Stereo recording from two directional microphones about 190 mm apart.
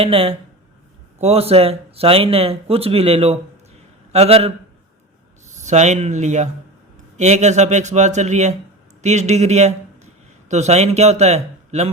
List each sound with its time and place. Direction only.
0.0 s speech: 30° right (ahead or behind)
5.5 s speech: 40° right (ahead or behind)